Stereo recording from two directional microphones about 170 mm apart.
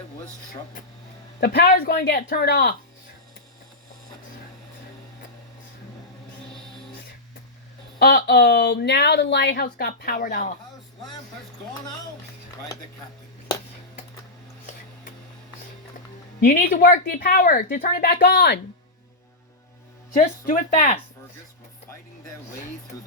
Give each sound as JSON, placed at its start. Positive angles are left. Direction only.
{"t": 1.4, "sound": "speech", "side_deg": 60}
{"t": 7.9, "sound": "speech", "side_deg": 65}
{"t": 16.4, "sound": "speech", "side_deg": 55}
{"t": 20.1, "sound": "a woman's voice", "side_deg": 50}